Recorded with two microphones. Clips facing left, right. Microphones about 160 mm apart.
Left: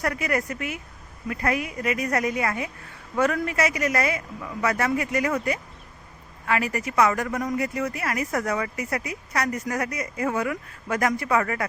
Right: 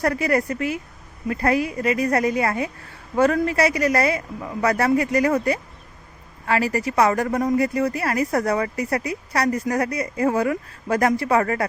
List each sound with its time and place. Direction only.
0.0 s a woman's voice: 35° right (ahead or behind)